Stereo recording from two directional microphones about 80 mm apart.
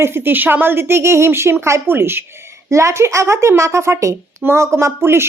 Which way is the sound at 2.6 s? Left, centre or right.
Right.